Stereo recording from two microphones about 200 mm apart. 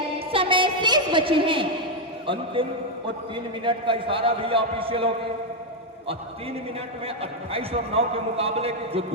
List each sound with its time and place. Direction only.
0.3 s a woman's voice: 25° right (ahead or behind)
7.2 s a man's voice: 30° right (ahead or behind)